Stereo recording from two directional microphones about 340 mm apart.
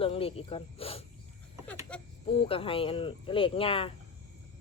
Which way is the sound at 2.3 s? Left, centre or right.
Centre.